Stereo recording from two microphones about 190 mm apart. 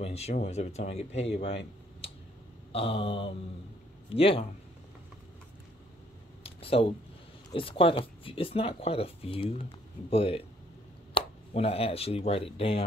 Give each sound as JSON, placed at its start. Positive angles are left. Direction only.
{"t": 0.0, "sound": "speech", "side_deg": 35}
{"t": 6.4, "sound": "a sound", "side_deg": 30}
{"t": 7.5, "sound": "speech", "side_deg": 30}